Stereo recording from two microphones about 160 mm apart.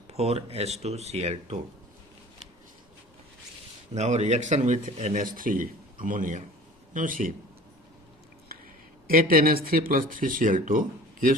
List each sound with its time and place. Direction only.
0.1 s speech: 40° right (ahead or behind)
3.9 s speech: 45° right (ahead or behind)
5.1 s speech: 60° right (ahead or behind)
9.3 s speech: 65° right (ahead or behind)